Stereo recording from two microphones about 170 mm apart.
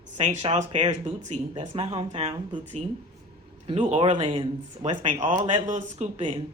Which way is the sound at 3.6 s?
35° right (ahead or behind).